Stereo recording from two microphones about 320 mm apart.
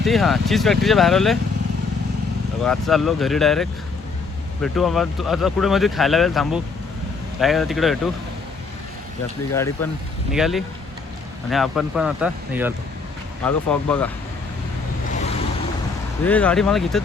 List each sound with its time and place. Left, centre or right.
0.0 s speech: centre
2.6 s speech: centre
9.6 s speech: centre
16.2 s speech: centre